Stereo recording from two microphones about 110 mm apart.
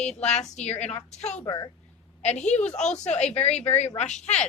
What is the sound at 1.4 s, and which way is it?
Speech, 40° left (ahead or behind).